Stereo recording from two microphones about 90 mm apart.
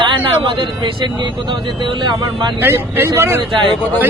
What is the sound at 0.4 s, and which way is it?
Speech, 65° right (ahead or behind).